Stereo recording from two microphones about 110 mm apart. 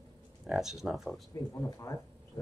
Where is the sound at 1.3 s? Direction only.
30° left (ahead or behind).